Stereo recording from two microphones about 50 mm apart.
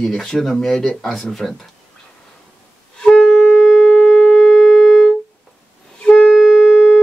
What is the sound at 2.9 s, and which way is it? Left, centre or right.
Wind instrument, centre.